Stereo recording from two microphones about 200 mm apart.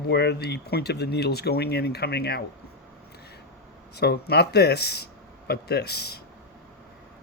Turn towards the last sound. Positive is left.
turn(degrees=55)  # may be behind; listen again after turning